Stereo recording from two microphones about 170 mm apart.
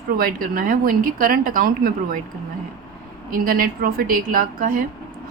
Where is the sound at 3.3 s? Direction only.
60° right (ahead or behind).